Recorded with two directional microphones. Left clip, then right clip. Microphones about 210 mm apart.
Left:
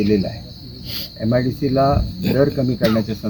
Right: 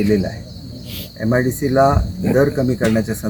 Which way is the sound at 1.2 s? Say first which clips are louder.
Right 2 dB; centre (ahead or behind).